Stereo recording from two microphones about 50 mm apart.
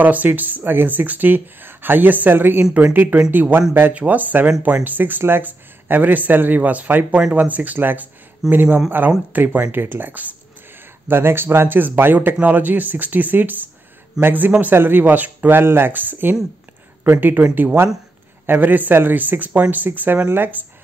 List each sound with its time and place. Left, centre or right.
0.0 s speech: right
11.1 s speech: right